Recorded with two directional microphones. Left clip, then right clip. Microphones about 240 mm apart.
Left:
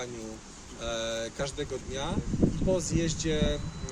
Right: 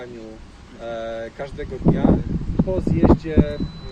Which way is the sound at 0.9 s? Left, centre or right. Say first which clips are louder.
Right 4 dB; left.